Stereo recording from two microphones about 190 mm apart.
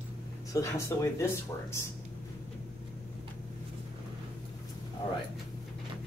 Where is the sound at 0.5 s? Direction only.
15° left (ahead or behind).